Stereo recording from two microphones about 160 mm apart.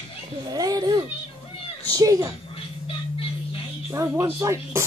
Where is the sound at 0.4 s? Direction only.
25° right (ahead or behind).